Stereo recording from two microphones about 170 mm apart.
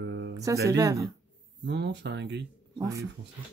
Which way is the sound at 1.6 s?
90° right.